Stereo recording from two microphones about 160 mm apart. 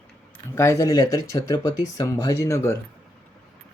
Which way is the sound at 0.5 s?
20° left (ahead or behind).